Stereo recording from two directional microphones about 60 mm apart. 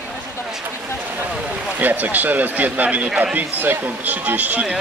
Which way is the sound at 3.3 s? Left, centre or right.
Right.